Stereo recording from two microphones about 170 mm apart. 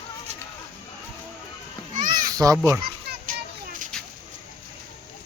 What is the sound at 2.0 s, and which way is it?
Children playing, 50° right (ahead or behind).